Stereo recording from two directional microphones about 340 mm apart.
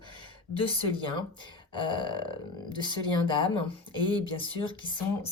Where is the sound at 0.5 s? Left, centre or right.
Centre.